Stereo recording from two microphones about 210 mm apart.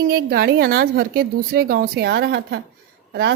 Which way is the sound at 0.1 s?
50° right (ahead or behind).